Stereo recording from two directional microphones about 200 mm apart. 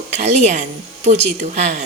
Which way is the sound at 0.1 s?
35° right (ahead or behind).